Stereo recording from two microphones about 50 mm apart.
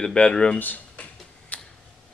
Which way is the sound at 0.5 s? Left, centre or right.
Left.